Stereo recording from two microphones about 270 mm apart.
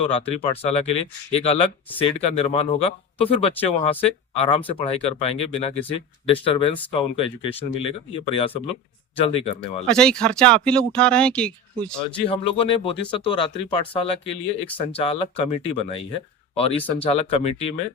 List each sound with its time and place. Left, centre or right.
0.0 s speech: left
9.9 s speech: centre
12.2 s speech: centre